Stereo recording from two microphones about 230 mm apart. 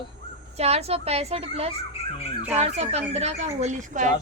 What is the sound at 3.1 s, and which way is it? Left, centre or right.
A child's voice, right.